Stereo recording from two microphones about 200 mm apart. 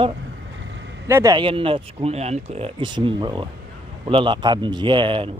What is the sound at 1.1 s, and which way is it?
A man's voice, 15° right (ahead or behind).